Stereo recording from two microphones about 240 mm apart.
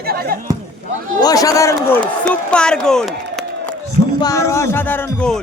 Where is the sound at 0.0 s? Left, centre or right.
Right.